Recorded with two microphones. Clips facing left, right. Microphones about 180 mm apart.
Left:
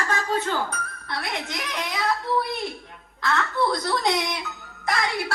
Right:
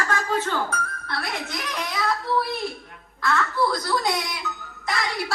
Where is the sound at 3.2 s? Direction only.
20° left (ahead or behind).